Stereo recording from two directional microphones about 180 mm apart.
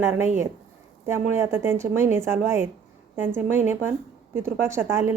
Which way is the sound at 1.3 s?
15° right (ahead or behind).